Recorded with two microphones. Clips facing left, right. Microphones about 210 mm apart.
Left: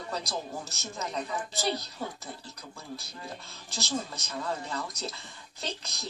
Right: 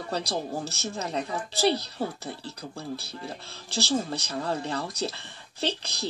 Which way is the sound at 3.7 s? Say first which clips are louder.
Right 7 dB; 35° right (ahead or behind).